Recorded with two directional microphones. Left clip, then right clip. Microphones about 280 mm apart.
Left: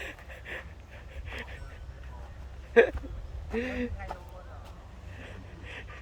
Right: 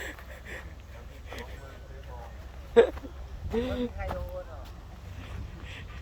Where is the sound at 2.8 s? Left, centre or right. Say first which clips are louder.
Right 1 dB; centre.